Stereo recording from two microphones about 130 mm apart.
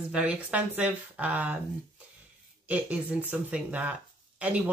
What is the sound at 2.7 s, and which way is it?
Speech, 10° right (ahead or behind).